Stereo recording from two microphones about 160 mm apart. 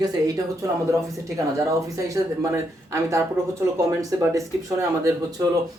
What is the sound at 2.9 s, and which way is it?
Speech, 20° right (ahead or behind).